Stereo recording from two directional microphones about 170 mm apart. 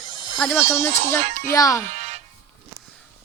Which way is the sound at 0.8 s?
15° left (ahead or behind).